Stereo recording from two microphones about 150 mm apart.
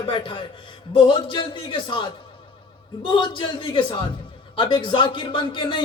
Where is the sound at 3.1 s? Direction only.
30° left (ahead or behind).